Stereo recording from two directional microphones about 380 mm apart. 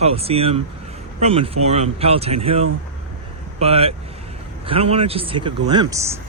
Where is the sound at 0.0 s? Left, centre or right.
Centre.